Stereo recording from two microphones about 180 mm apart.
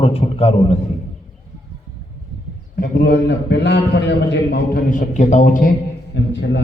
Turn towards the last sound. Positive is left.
turn(degrees=80)